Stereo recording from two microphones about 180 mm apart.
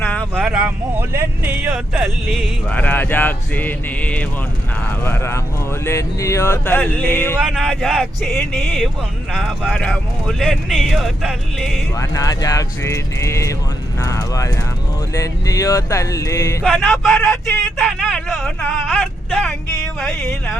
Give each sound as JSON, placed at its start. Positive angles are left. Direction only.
{"t": 0.0, "sound": "a sound", "side_deg": 10}
{"t": 0.4, "sound": "a sound", "side_deg": -5}
{"t": 1.6, "sound": "speech", "side_deg": -5}
{"t": 7.3, "sound": "speech", "side_deg": 0}
{"t": 11.9, "sound": "speech", "side_deg": 20}
{"t": 16.6, "sound": "speech", "side_deg": 5}